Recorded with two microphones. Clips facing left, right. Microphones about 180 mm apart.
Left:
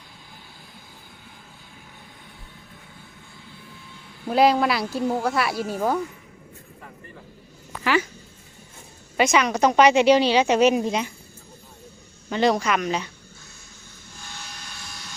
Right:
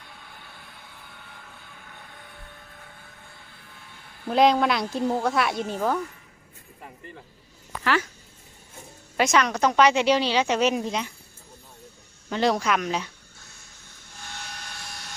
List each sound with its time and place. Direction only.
4.3 s speech: 5° left (ahead or behind)
9.1 s a woman's voice: centre (ahead or behind)
12.3 s speech: centre (ahead or behind)
14.8 s vehicle: 60° right (ahead or behind)